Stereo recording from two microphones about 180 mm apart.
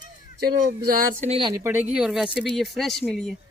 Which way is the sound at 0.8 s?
55° right (ahead or behind).